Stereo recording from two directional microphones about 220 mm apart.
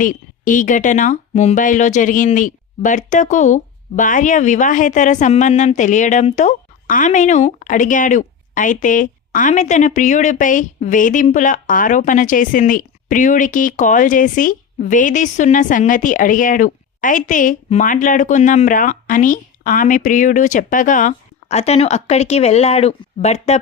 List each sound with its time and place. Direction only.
0.0 s speech: 35° left (ahead or behind)